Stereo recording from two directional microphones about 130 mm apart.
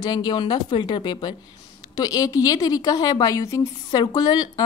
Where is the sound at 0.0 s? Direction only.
35° left (ahead or behind).